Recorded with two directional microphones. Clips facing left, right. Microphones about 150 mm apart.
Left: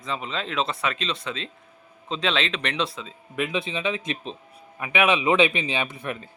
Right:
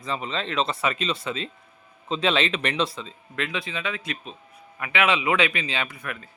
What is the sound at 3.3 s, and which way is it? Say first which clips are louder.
A man's voice: left 3 dB; 15° left (ahead or behind).